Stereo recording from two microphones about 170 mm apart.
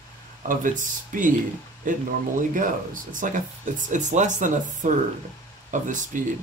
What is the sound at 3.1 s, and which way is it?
Speech, 50° right (ahead or behind).